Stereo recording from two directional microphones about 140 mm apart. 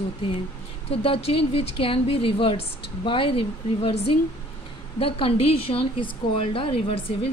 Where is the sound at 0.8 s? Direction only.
45° left (ahead or behind).